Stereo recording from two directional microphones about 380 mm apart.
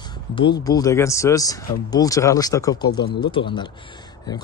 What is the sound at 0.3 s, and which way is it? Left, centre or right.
Speech, centre.